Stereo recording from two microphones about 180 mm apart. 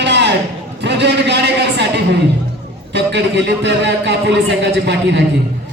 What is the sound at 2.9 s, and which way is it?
A man's voice, 75° right (ahead or behind).